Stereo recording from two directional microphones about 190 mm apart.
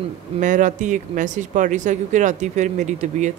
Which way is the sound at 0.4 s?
40° right (ahead or behind).